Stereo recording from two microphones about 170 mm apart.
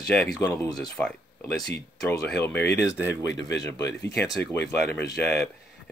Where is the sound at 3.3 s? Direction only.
20° left (ahead or behind).